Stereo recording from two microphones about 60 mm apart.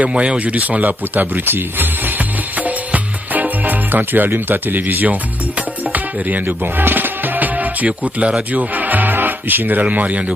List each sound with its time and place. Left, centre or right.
0.0 s speech: centre
8.7 s speech: right